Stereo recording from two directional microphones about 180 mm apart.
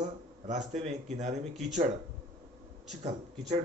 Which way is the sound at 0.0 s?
40° right (ahead or behind).